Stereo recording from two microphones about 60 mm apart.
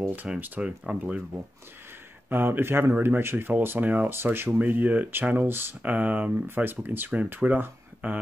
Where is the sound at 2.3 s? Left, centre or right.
Right.